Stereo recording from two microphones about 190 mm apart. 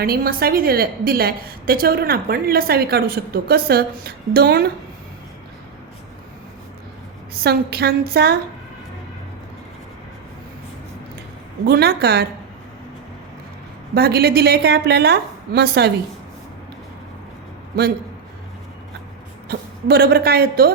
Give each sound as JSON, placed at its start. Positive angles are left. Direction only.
{"t": 0.0, "sound": "a woman's voice", "side_deg": -50}
{"t": 7.4, "sound": "a woman's voice", "side_deg": -55}
{"t": 11.6, "sound": "a woman's voice", "side_deg": -60}
{"t": 13.9, "sound": "a woman's voice", "side_deg": -55}
{"t": 17.7, "sound": "a woman's voice", "side_deg": -55}
{"t": 19.5, "sound": "a woman's voice", "side_deg": -55}